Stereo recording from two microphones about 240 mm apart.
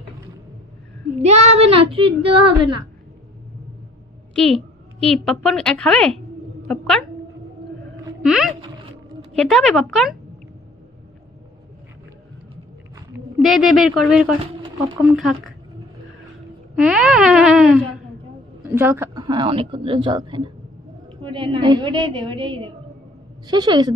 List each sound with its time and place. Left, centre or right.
1.2 s a woman's voice: right
5.0 s a woman's voice: centre
8.2 s a woman's voice: centre
13.4 s a woman's voice: centre
16.7 s a woman's voice: centre